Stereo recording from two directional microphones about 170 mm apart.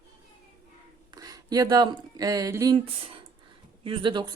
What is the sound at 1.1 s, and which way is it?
Speech, 20° right (ahead or behind).